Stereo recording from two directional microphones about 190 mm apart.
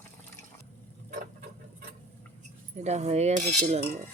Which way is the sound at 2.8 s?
35° right (ahead or behind).